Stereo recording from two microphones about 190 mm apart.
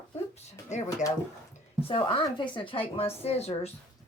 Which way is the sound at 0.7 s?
35° left (ahead or behind).